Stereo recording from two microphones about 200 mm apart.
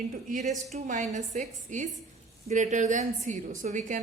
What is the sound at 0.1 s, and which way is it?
A woman's voice, 40° right (ahead or behind).